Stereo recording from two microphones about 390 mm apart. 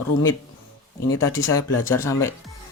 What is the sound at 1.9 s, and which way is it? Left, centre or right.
Speech, centre.